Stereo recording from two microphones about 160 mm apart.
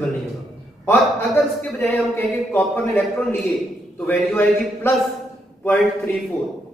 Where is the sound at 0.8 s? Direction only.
15° left (ahead or behind).